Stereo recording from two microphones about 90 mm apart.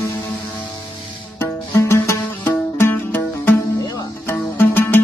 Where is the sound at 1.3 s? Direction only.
30° left (ahead or behind).